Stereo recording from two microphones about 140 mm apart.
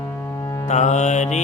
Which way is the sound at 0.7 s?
55° left (ahead or behind).